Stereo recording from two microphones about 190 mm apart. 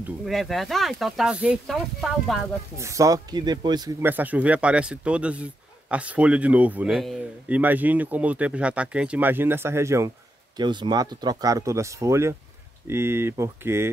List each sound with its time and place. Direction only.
0.2 s speech: centre (ahead or behind)
2.8 s speech: 15° right (ahead or behind)
4.0 s speech: 10° right (ahead or behind)